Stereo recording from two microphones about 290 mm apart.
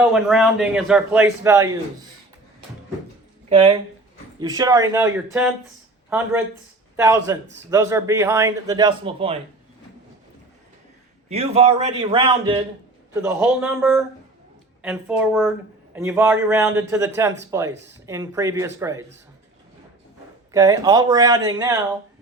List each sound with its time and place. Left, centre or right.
0.0 s a man's voice: centre
3.5 s a man's voice: centre
11.3 s a man's voice: right
20.5 s a man's voice: centre